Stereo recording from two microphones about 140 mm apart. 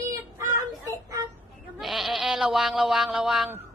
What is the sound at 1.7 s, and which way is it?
Bleat, centre (ahead or behind).